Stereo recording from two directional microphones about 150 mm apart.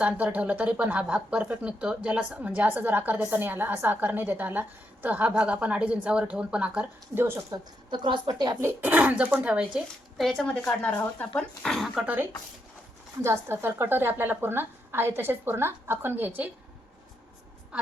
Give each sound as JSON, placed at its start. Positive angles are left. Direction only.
{"t": 0.0, "sound": "speech", "side_deg": -10}
{"t": 7.9, "sound": "a woman's voice", "side_deg": -30}
{"t": 8.6, "sound": "speech", "side_deg": -10}